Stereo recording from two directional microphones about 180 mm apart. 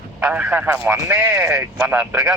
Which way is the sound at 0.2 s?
10° right (ahead or behind).